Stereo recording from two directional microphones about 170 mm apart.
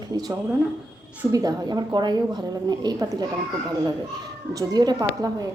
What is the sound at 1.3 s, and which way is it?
A woman's voice, 20° right (ahead or behind).